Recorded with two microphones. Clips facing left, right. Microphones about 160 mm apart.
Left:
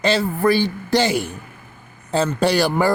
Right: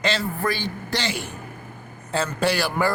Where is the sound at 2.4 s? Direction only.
30° left (ahead or behind).